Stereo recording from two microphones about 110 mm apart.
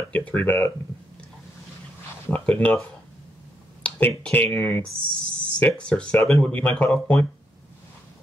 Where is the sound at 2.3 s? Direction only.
15° left (ahead or behind).